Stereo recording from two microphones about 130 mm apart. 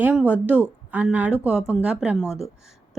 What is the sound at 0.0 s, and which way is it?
Speech, 10° right (ahead or behind).